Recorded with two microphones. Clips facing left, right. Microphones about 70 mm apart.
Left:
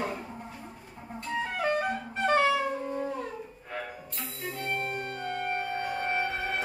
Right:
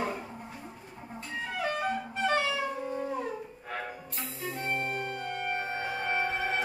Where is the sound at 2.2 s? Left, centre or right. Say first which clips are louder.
Left 4 dB; left.